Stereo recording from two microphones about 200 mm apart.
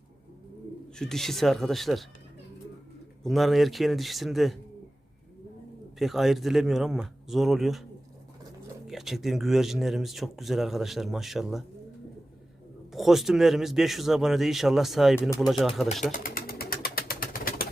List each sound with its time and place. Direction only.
0.9 s speech: centre (ahead or behind)
3.2 s speech: centre (ahead or behind)
6.0 s speech: centre (ahead or behind)
8.9 s speech: centre (ahead or behind)
12.9 s speech: centre (ahead or behind)
16.2 s bird: 50° left (ahead or behind)